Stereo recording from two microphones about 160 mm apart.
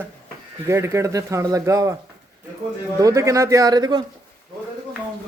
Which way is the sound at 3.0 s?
20° right (ahead or behind).